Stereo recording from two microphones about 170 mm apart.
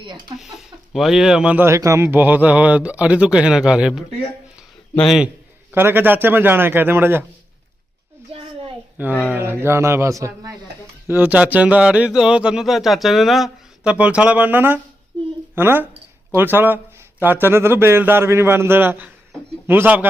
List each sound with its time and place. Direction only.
0.9 s a man's voice: centre (ahead or behind)
5.7 s a man's voice: 10° right (ahead or behind)
8.3 s a sound: 35° right (ahead or behind)
9.2 s a man's voice: 10° right (ahead or behind)